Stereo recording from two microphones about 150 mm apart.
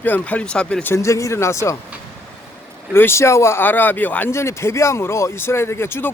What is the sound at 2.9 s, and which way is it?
Speech, 15° left (ahead or behind).